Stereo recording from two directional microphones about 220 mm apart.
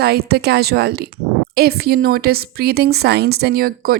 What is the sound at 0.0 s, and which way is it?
A woman's voice, 45° right (ahead or behind).